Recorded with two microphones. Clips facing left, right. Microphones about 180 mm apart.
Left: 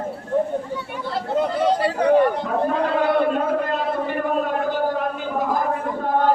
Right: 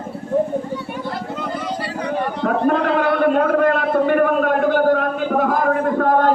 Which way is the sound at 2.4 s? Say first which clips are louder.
Right 4 dB; 65° right (ahead or behind).